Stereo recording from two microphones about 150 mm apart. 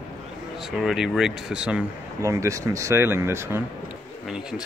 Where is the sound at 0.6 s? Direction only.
Centre (ahead or behind).